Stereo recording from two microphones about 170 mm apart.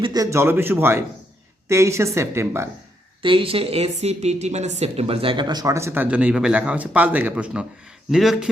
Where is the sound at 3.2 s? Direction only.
30° right (ahead or behind).